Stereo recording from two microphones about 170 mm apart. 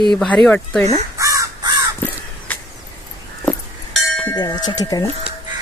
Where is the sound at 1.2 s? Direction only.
20° right (ahead or behind).